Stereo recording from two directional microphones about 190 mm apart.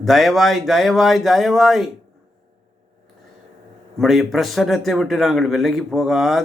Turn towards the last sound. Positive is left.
turn(degrees=0)  # may be behind; listen again after turning